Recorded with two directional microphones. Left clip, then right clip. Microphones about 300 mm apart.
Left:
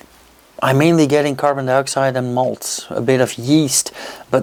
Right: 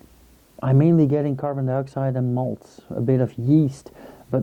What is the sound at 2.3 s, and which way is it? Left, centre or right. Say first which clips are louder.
Speech: left 9 dB; left.